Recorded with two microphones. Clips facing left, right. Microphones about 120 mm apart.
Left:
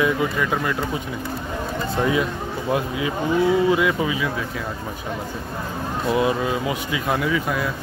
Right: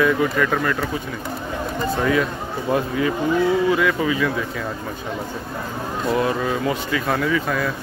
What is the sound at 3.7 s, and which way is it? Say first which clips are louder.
Speech: right 1 dB; 15° left (ahead or behind).